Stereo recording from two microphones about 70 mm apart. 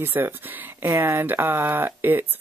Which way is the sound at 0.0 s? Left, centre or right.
Right.